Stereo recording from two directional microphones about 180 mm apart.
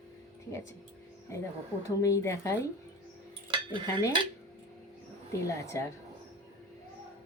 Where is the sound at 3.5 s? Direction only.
25° right (ahead or behind).